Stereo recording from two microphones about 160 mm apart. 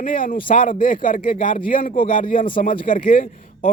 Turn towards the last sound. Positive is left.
turn(degrees=60)  # may be behind; listen again after turning